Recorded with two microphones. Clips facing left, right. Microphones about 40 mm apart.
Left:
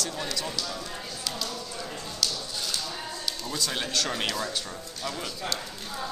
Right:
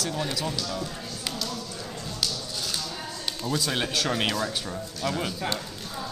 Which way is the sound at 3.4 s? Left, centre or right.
Centre.